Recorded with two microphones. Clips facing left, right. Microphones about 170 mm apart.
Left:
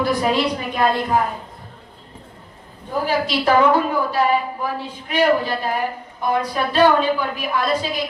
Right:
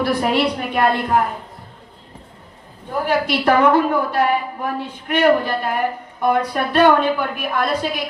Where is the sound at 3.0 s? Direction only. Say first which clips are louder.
Right 2 dB; 60° right (ahead or behind).